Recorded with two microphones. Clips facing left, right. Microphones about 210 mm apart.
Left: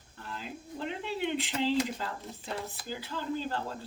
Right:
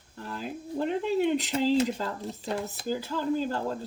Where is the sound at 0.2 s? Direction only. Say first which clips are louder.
Right 6 dB; 45° right (ahead or behind).